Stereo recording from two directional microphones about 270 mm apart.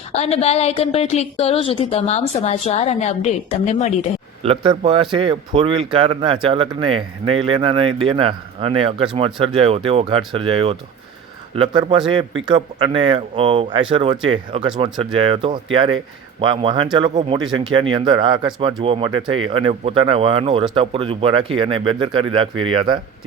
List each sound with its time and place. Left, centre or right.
0.1 s a woman's voice: left
4.4 s speech: centre